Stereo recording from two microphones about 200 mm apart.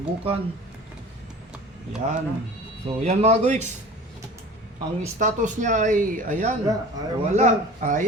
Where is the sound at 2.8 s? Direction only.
35° right (ahead or behind).